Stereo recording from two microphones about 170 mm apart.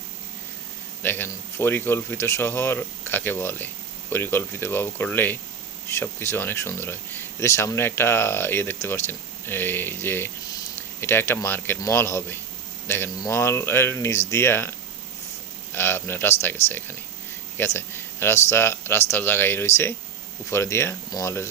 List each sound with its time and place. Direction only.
1.0 s speech: 10° left (ahead or behind)